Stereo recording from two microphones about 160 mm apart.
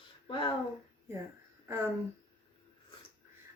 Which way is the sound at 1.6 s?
15° right (ahead or behind).